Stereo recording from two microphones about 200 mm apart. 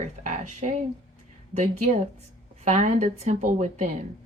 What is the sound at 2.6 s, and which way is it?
Speech, 35° right (ahead or behind).